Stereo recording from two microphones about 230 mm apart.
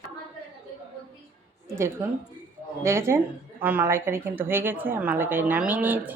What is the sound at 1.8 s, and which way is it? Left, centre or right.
A woman's voice, centre.